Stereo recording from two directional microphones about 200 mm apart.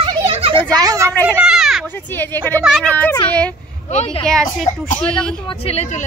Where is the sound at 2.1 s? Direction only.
10° left (ahead or behind).